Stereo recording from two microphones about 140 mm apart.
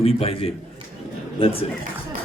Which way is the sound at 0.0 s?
45° left (ahead or behind).